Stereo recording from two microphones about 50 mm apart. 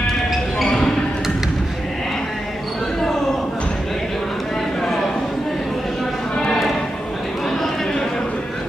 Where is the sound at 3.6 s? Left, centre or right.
Centre.